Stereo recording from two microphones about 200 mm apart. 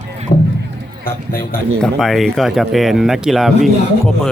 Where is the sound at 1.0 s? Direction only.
50° left (ahead or behind).